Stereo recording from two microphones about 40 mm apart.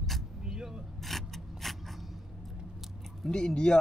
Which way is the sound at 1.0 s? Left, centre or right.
Centre.